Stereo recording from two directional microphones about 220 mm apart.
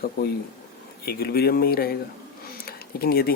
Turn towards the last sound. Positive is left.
turn(degrees=45)  # may be behind; listen again after turning